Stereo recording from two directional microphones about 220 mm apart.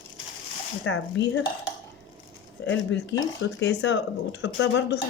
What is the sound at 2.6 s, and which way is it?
Speech, 55° left (ahead or behind).